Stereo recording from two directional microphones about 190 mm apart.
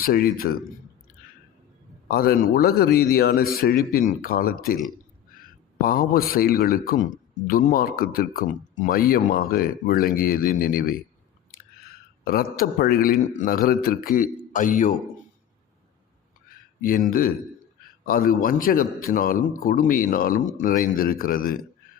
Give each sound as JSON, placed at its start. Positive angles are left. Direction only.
{"t": 0.0, "sound": "speech", "side_deg": 50}
{"t": 2.0, "sound": "speech", "side_deg": 50}
{"t": 5.8, "sound": "speech", "side_deg": 50}
{"t": 12.2, "sound": "speech", "side_deg": 50}
{"t": 16.5, "sound": "a sound", "side_deg": 50}
{"t": 18.0, "sound": "a man's voice", "side_deg": 50}